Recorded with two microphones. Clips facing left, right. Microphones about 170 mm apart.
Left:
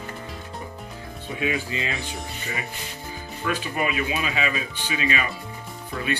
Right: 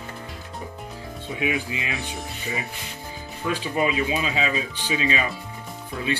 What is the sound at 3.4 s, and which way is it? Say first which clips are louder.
Speech: right 2 dB; 25° right (ahead or behind).